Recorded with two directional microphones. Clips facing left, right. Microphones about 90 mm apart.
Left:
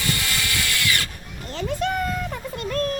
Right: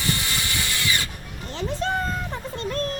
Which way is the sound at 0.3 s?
25° right (ahead or behind).